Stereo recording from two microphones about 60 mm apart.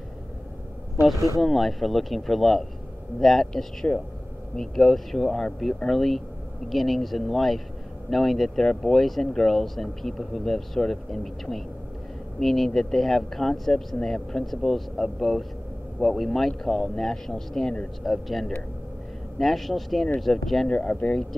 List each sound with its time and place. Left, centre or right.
1.4 s speech: centre
3.8 s speech: left
4.6 s speech: centre
20.6 s speech: centre